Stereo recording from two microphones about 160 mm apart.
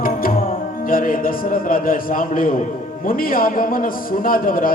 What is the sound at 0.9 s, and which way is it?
A man's voice, 60° left (ahead or behind).